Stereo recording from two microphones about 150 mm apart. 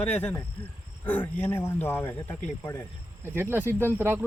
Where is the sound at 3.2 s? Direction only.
15° right (ahead or behind).